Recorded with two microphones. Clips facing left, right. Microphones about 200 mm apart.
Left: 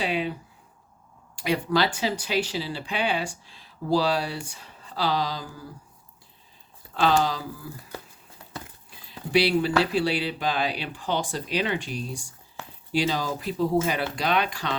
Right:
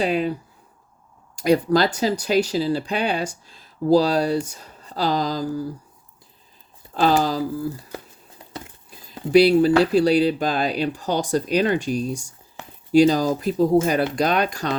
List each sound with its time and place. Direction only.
0.0 s speech: 45° right (ahead or behind)
1.4 s speech: 40° right (ahead or behind)
6.9 s speech: 40° right (ahead or behind)
8.9 s speech: 40° right (ahead or behind)